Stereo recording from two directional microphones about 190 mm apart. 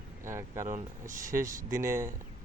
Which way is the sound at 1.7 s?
15° right (ahead or behind).